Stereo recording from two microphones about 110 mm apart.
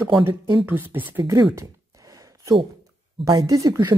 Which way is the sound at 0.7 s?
15° right (ahead or behind).